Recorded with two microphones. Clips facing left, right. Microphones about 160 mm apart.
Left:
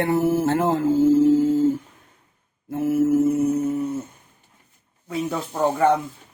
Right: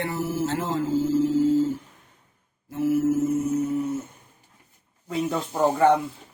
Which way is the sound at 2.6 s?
55° left (ahead or behind).